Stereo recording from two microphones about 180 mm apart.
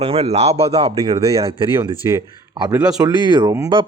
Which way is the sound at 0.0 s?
35° right (ahead or behind).